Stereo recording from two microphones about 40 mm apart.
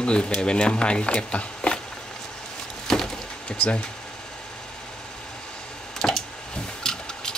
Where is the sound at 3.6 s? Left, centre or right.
Left.